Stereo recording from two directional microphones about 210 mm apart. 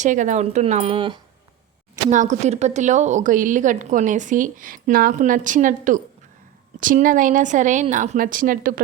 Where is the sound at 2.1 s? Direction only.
35° right (ahead or behind).